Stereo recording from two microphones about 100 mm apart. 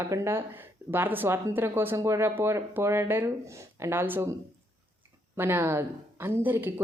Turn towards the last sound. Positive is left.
turn(degrees=-20)  # may be behind; listen again after turning